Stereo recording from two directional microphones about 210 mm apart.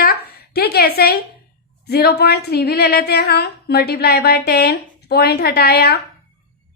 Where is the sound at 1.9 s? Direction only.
50° left (ahead or behind).